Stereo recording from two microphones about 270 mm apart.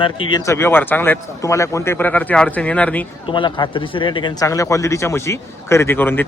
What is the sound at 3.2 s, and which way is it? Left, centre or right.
Speech, centre.